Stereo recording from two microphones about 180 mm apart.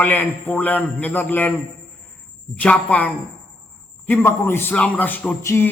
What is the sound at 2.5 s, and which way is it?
Speech, 5° left (ahead or behind).